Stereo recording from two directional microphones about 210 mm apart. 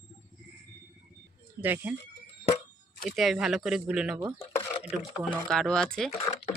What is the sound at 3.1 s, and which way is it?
A woman's voice, centre (ahead or behind).